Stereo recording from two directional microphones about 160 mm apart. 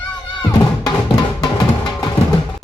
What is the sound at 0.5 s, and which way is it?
Music, 25° left (ahead or behind).